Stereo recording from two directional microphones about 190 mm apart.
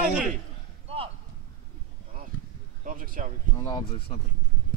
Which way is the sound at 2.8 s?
45° right (ahead or behind).